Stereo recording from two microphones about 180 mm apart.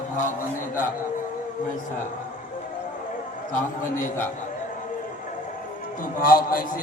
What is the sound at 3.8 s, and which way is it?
Mantra, 45° left (ahead or behind).